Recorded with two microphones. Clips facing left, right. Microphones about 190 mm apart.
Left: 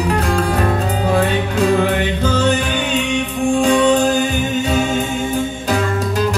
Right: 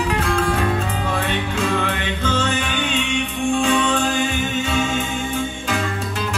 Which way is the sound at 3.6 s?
40° left (ahead or behind).